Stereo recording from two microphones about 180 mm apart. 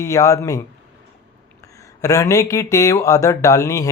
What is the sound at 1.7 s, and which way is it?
Speech, 20° left (ahead or behind).